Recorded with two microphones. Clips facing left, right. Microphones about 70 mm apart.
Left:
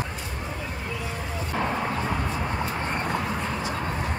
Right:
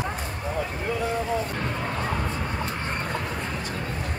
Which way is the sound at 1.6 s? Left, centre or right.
Centre.